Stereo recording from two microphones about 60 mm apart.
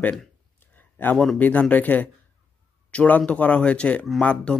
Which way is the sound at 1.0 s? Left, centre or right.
Left.